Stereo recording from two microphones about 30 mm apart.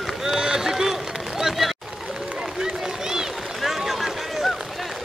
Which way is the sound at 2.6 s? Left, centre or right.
Right.